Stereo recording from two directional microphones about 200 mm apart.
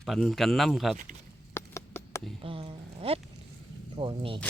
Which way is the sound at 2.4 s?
25° right (ahead or behind).